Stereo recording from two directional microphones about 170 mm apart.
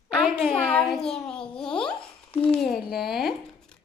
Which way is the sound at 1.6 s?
30° left (ahead or behind).